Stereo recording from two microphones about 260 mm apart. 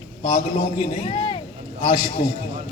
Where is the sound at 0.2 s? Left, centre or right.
Left.